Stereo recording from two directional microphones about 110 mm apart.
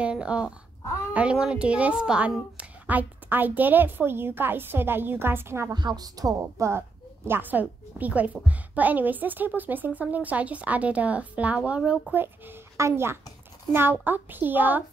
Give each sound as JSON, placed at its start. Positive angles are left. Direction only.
{"t": 0.0, "sound": "a woman's voice", "side_deg": -10}
{"t": 5.8, "sound": "speech", "side_deg": -40}
{"t": 6.4, "sound": "a woman's voice", "side_deg": -20}